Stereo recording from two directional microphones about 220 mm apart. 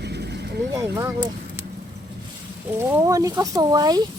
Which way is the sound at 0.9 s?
10° right (ahead or behind).